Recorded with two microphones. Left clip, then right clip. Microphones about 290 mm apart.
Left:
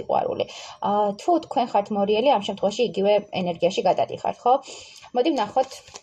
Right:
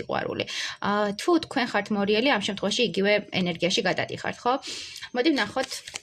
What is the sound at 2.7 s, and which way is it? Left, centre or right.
Speech, right.